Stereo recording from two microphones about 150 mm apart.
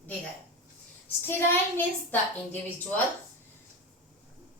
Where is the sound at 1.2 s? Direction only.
15° left (ahead or behind).